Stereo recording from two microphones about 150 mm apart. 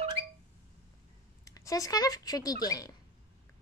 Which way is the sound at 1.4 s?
20° left (ahead or behind).